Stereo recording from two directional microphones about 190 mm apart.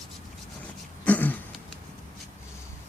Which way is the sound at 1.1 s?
10° left (ahead or behind).